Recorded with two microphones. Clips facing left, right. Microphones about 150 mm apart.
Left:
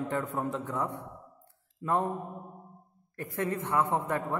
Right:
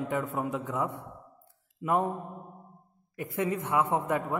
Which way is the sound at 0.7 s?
15° right (ahead or behind).